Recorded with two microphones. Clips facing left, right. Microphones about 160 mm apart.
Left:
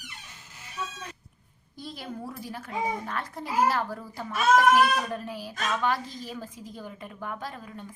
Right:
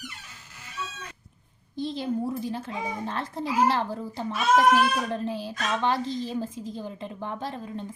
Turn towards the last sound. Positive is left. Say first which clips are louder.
# right 5 dB
turn(degrees=-25)  # may be behind; listen again after turning